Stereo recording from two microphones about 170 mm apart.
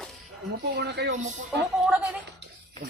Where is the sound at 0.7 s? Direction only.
85° right.